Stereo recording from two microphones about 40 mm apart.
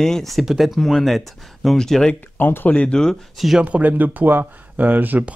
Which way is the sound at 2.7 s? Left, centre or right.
Left.